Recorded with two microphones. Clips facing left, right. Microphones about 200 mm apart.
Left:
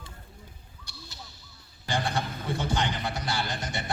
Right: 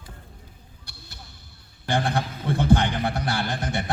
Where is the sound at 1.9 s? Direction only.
55° right (ahead or behind).